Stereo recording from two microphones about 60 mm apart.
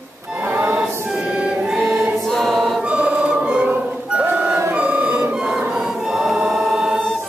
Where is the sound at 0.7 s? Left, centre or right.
Centre.